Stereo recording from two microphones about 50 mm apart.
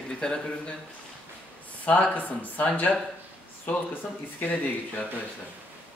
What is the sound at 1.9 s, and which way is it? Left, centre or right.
Speech, left.